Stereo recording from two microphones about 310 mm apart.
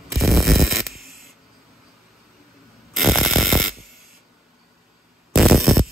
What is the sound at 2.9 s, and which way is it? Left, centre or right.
Hum, centre.